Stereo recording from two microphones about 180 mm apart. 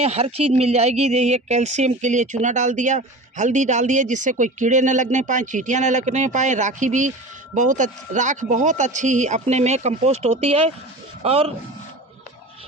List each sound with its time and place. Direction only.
0.0 s speech: 35° right (ahead or behind)